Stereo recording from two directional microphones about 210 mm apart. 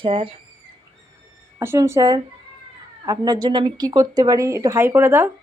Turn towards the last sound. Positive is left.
turn(degrees=-10)  # may be behind; listen again after turning